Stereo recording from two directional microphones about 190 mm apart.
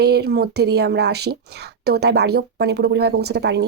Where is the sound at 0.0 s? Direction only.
55° right (ahead or behind).